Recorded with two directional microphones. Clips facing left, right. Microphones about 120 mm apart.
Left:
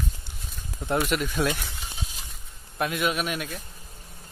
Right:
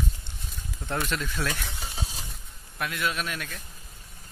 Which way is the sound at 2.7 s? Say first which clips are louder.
Left 4 dB; 20° left (ahead or behind).